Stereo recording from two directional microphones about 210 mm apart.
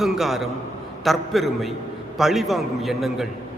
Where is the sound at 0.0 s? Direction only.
Centre (ahead or behind).